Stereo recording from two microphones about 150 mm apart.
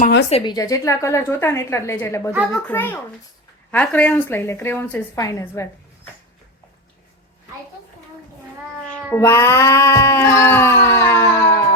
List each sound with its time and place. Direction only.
0.4 s a woman's voice: 25° left (ahead or behind)
8.9 s cat: 15° left (ahead or behind)